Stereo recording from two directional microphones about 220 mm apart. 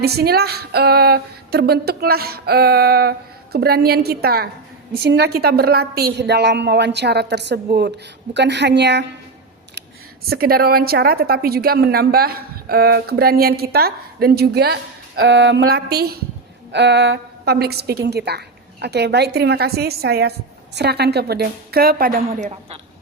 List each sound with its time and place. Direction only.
0.0 s a woman's voice: 45° right (ahead or behind)
10.2 s a woman's voice: 45° right (ahead or behind)
22.3 s a woman's voice: 30° right (ahead or behind)